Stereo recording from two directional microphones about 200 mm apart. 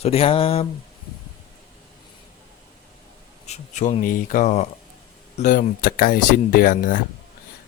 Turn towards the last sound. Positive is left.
turn(degrees=45)  # may be behind; listen again after turning